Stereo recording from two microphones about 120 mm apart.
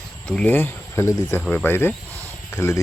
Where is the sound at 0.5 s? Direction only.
20° left (ahead or behind).